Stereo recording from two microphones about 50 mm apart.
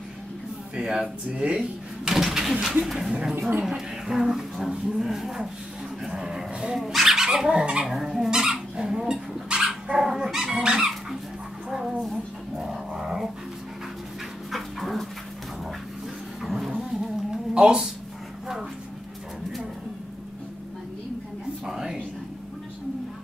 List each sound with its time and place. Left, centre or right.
0.7 s speech: centre
1.6 s a sound: centre
2.8 s speech: centre
3.3 s speech: right
3.6 s speech: centre
7.9 s speech: centre
8.3 s dog: centre
9.9 s speech: centre
12.5 s dog: centre
14.5 s dog: centre
16.4 s a sound: centre
16.7 s a sound: centre
17.6 s speech: centre
21.6 s a sound: centre